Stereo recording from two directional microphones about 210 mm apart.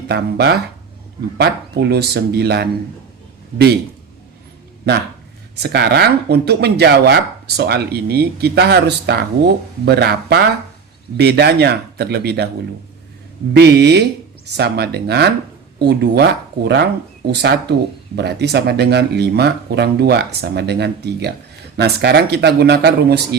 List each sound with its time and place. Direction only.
0.1 s speech: 50° right (ahead or behind)
5.5 s speech: 50° right (ahead or behind)
13.6 s speech: 55° right (ahead or behind)